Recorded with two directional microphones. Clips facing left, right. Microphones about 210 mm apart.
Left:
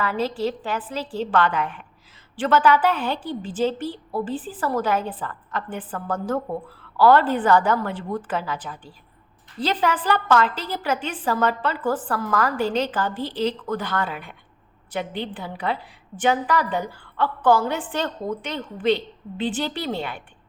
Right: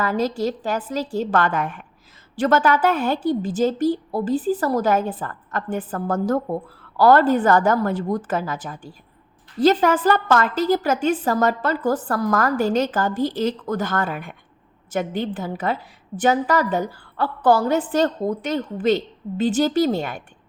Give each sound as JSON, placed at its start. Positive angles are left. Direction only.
{"t": 0.0, "sound": "a woman's voice", "side_deg": -45}